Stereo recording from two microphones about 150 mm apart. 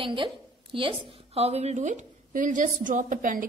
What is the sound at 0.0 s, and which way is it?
A woman's voice, 35° right (ahead or behind).